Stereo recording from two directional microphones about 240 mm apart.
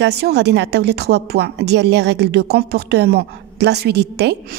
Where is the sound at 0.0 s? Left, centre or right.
Right.